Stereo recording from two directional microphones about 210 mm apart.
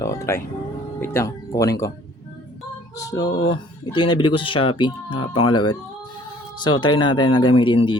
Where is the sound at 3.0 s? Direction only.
15° left (ahead or behind).